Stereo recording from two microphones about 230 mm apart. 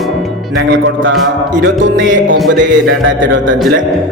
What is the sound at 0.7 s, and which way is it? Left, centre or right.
Speech, right.